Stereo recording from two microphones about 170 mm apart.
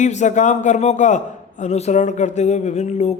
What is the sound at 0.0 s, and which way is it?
A man's voice, 45° left (ahead or behind).